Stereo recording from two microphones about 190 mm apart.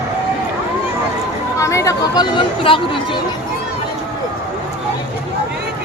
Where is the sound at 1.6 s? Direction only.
15° left (ahead or behind).